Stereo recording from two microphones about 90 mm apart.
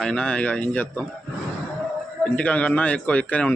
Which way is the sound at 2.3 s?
15° left (ahead or behind).